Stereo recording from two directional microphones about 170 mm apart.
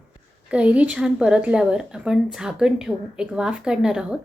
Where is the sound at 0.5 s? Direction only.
5° right (ahead or behind).